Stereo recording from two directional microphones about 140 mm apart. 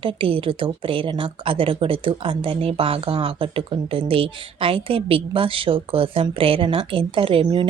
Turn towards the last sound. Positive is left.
turn(degrees=-40)  # may be behind; listen again after turning